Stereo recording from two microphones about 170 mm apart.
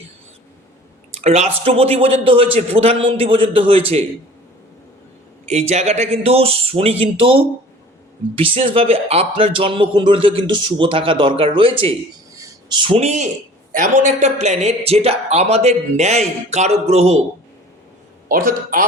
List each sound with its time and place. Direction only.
1.2 s a man's voice: 40° right (ahead or behind)
5.5 s a man's voice: 40° right (ahead or behind)
18.3 s a man's voice: 55° right (ahead or behind)